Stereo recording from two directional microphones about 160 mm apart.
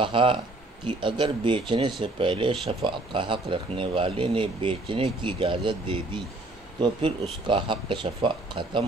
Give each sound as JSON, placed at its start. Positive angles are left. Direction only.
{"t": 0.0, "sound": "speech", "side_deg": -30}